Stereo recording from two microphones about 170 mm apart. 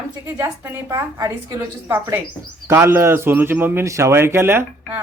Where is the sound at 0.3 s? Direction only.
15° right (ahead or behind).